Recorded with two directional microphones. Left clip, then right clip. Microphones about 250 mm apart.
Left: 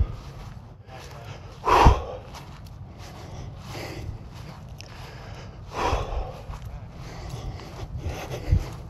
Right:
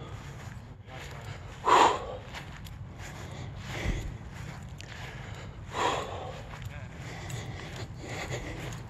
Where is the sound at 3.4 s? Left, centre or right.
Centre.